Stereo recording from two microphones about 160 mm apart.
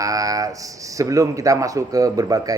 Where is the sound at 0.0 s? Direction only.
20° right (ahead or behind).